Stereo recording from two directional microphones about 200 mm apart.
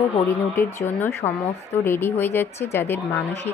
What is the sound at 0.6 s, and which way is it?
Speech, 10° left (ahead or behind).